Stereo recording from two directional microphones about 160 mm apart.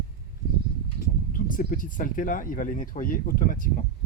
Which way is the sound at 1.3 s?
60° left (ahead or behind).